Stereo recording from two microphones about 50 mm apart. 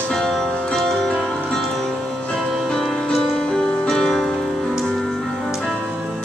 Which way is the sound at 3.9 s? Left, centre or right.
Centre.